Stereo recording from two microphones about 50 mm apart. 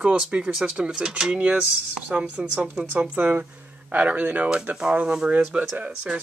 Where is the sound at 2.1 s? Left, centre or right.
Right.